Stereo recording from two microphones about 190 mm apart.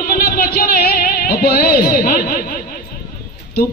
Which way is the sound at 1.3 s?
50° left (ahead or behind).